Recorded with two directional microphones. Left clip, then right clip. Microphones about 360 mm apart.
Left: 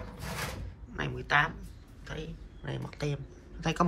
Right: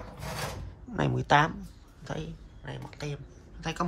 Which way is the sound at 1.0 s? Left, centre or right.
Centre.